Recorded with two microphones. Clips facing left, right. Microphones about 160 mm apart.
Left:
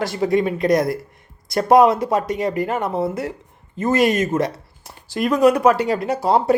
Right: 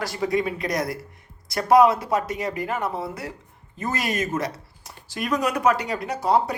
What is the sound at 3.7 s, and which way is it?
Speech, 25° left (ahead or behind).